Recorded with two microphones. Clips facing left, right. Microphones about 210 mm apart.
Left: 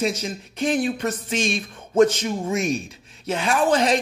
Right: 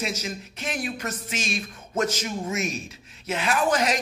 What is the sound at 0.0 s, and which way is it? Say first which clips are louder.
Speech: left 6 dB; 30° left (ahead or behind).